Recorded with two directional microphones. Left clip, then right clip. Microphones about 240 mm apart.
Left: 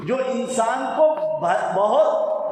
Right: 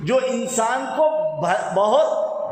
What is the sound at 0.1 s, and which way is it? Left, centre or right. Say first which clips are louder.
A man's voice: right 3 dB; right.